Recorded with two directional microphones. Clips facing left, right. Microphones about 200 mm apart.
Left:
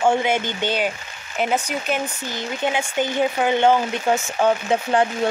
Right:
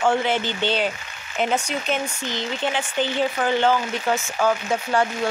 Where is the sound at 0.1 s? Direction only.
15° left (ahead or behind).